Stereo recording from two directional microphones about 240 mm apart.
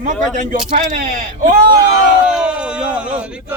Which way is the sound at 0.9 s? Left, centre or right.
Right.